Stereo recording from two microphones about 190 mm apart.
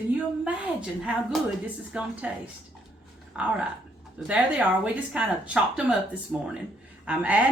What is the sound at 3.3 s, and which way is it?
A woman's voice, 5° right (ahead or behind).